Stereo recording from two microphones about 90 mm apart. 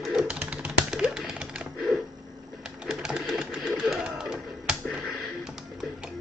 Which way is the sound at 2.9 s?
5° right (ahead or behind).